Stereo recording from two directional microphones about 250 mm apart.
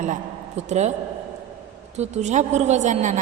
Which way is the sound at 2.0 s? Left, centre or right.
Right.